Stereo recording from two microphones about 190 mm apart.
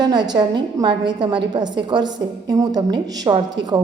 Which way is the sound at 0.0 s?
20° right (ahead or behind).